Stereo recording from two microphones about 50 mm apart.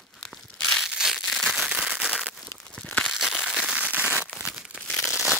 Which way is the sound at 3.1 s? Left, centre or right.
Centre.